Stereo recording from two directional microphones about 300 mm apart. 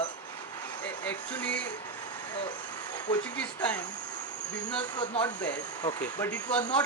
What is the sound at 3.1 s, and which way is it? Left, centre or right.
Speech, centre.